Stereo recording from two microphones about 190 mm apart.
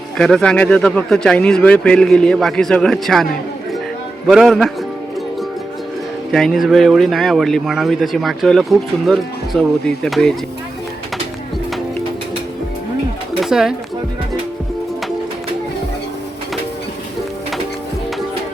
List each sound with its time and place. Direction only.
0.2 s speech: 5° left (ahead or behind)
4.3 s speech: centre (ahead or behind)
6.3 s speech: centre (ahead or behind)
13.4 s speech: centre (ahead or behind)